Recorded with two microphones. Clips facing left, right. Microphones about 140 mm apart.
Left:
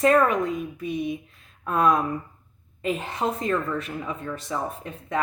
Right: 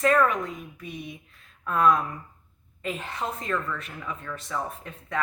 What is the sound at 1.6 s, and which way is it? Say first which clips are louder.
Speech: left 1 dB; 15° left (ahead or behind).